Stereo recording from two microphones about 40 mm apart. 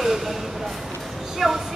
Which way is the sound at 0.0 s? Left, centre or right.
Centre.